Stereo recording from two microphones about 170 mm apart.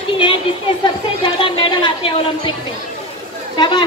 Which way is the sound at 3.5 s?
25° left (ahead or behind).